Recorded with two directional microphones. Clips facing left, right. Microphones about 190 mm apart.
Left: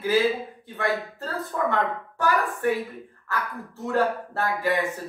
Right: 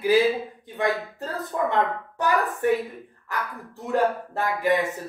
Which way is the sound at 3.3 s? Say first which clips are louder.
Left 1 dB; 15° right (ahead or behind).